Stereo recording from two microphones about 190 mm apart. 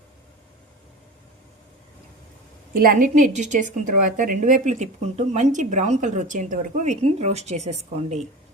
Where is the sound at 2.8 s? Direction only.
45° right (ahead or behind).